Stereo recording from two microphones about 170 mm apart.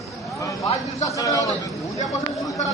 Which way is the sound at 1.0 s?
20° left (ahead or behind).